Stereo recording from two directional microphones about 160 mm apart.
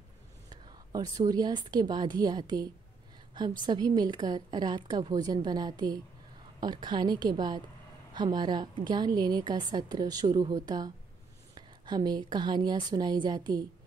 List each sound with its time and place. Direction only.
0.5 s a woman's voice: 25° right (ahead or behind)